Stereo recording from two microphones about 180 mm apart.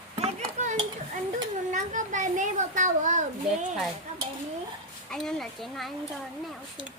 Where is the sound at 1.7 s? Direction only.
45° right (ahead or behind).